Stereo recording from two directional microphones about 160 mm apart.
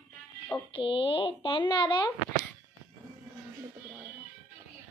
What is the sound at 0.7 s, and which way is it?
Speech, 35° left (ahead or behind).